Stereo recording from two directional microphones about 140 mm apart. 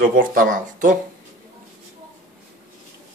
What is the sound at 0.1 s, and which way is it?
Speech, 80° right.